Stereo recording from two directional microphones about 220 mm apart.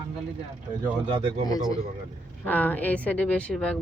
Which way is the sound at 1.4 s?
15° left (ahead or behind).